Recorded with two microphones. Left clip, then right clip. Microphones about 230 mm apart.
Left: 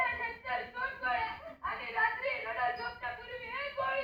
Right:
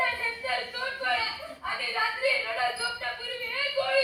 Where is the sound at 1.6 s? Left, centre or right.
Right.